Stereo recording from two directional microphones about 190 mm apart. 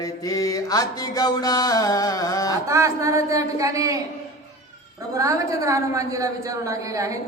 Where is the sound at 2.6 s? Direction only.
15° right (ahead or behind).